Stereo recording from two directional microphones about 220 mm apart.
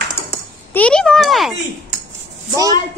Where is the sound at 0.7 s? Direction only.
5° left (ahead or behind).